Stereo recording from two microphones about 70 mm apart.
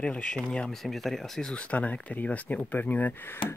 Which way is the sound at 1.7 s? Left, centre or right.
Left.